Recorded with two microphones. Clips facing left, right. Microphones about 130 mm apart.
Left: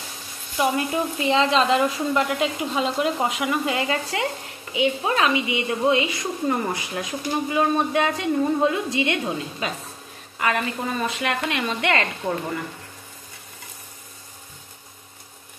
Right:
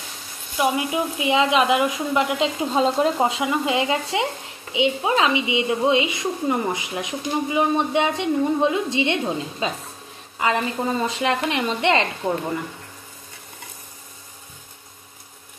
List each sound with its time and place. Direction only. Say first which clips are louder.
0.6 s speech: right 1 dB; 10° right (ahead or behind)